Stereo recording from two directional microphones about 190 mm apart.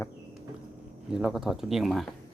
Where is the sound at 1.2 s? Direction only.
Centre (ahead or behind).